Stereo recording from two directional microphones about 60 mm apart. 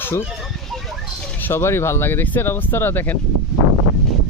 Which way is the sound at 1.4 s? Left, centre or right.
Left.